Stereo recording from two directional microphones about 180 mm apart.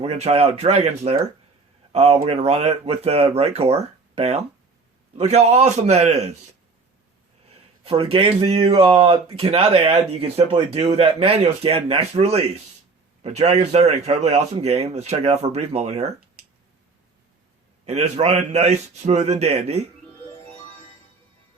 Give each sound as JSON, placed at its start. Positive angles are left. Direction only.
{"t": 0.0, "sound": "speech", "side_deg": -35}
{"t": 7.9, "sound": "speech", "side_deg": -30}
{"t": 17.8, "sound": "speech", "side_deg": -40}